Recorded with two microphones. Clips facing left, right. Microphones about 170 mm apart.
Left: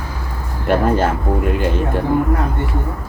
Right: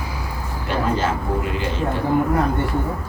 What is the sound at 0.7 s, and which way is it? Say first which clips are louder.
Speech: left 6 dB; 55° left (ahead or behind).